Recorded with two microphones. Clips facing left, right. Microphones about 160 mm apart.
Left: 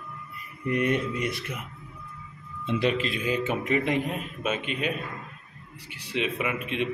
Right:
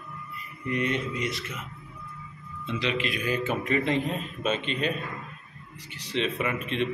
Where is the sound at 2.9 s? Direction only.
35° left (ahead or behind).